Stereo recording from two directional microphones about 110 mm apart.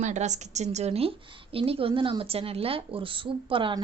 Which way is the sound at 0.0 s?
90° right.